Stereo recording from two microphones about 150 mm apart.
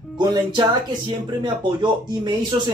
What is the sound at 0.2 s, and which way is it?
Speech, 25° right (ahead or behind).